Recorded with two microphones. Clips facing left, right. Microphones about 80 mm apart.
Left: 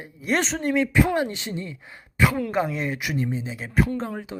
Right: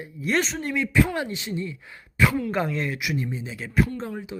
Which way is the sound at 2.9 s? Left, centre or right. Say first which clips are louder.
Left 2 dB; left.